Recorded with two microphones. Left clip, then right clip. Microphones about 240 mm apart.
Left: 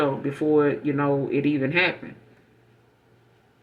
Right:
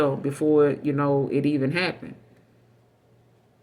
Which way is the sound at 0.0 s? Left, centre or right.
Right.